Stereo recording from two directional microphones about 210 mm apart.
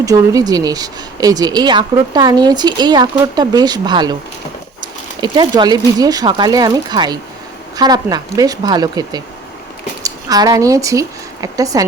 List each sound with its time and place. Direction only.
0.0 s speech: 15° right (ahead or behind)